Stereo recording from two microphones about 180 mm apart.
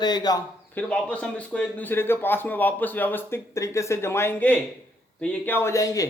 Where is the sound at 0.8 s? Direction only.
5° left (ahead or behind).